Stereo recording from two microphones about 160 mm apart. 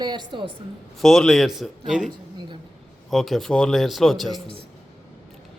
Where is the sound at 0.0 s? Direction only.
30° right (ahead or behind).